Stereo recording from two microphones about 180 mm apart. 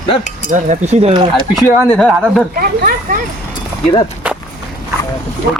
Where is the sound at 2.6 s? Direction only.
55° right (ahead or behind).